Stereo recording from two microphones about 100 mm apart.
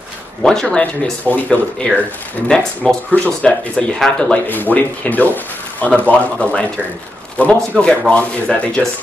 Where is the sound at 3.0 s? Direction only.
15° left (ahead or behind).